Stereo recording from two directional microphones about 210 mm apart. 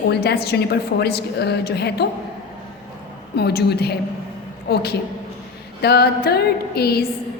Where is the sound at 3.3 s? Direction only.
50° left (ahead or behind).